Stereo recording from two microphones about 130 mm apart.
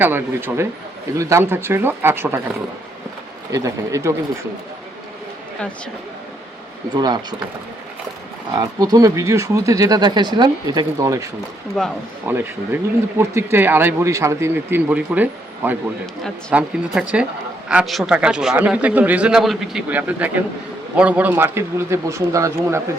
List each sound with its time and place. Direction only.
0.0 s speech: 15° right (ahead or behind)
3.5 s speech: 25° right (ahead or behind)
6.9 s speech: 30° right (ahead or behind)
8.5 s speech: 30° right (ahead or behind)
11.8 s speech: 5° left (ahead or behind)
12.2 s speech: 15° right (ahead or behind)